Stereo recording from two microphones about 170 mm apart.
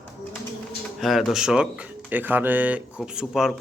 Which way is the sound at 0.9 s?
Centre (ahead or behind).